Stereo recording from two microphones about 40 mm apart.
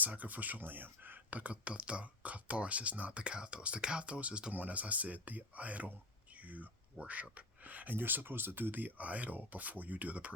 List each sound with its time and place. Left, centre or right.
0.0 s speech: right
3.1 s speech: right
4.5 s speech: right
6.3 s a sound: right
7.0 s speech: right
7.9 s speech: right